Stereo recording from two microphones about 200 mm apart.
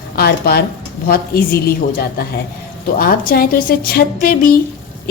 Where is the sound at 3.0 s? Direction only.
45° left (ahead or behind).